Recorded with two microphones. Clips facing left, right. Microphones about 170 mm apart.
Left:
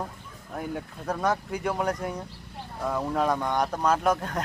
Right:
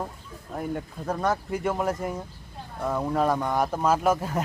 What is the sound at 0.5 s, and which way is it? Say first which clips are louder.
Speech: right 2 dB; centre (ahead or behind).